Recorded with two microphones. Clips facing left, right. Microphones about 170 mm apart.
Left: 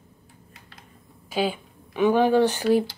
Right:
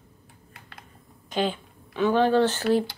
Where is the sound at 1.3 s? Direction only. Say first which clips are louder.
Left 1 dB; 10° left (ahead or behind).